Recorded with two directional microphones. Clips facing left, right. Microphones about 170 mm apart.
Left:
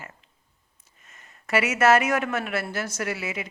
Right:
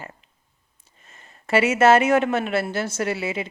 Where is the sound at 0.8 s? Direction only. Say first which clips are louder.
Right 3 dB; 30° right (ahead or behind).